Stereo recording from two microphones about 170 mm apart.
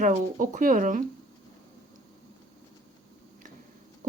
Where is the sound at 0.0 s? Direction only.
45° right (ahead or behind).